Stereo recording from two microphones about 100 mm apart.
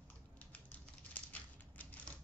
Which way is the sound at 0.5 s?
15° left (ahead or behind).